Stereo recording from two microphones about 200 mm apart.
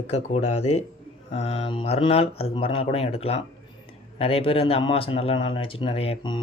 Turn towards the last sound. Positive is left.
turn(degrees=25)  # may be behind; listen again after turning